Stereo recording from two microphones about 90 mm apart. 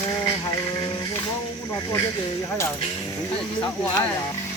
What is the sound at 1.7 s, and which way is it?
Speech, 35° left (ahead or behind).